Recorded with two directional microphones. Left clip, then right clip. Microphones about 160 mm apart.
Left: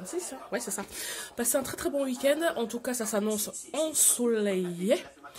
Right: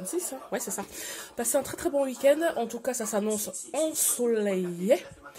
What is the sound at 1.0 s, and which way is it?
Speech, 15° left (ahead or behind).